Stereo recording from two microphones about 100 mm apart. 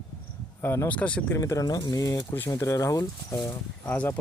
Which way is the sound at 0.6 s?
25° left (ahead or behind).